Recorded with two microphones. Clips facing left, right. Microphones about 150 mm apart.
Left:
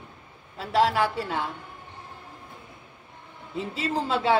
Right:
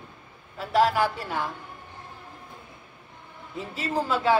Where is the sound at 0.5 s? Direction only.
25° left (ahead or behind).